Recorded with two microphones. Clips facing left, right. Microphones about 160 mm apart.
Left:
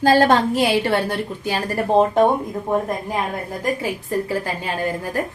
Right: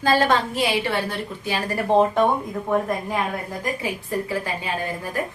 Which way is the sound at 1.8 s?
Centre (ahead or behind).